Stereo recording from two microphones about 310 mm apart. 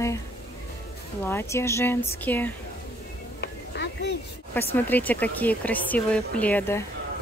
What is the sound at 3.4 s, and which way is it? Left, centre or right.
Music, left.